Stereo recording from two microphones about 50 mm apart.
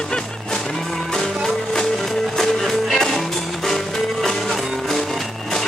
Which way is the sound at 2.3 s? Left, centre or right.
Centre.